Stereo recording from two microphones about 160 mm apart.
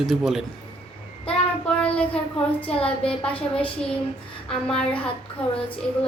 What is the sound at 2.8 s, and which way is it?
Child singing, 35° left (ahead or behind).